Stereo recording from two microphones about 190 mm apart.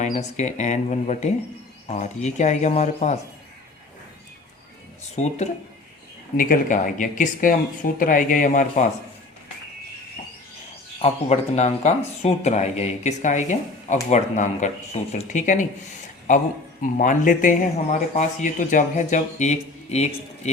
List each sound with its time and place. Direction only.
0.0 s speech: 40° left (ahead or behind)
5.1 s speech: 35° left (ahead or behind)
11.0 s speech: 35° left (ahead or behind)